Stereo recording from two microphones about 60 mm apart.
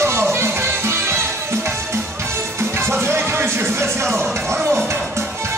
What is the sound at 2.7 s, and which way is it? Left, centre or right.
Music, right.